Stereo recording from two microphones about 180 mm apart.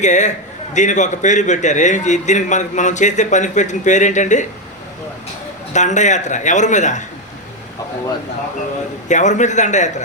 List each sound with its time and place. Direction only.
0.0 s a man's voice: 40° left (ahead or behind)
5.7 s a man's voice: 40° left (ahead or behind)
9.0 s a man's voice: 40° left (ahead or behind)